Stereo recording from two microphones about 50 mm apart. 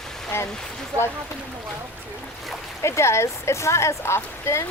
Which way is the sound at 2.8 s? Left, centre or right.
Left.